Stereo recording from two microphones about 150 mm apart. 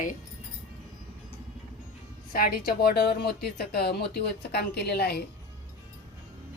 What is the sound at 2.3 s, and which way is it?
Speech, 85° left.